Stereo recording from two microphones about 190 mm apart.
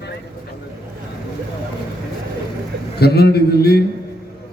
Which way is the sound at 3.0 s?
55° left (ahead or behind).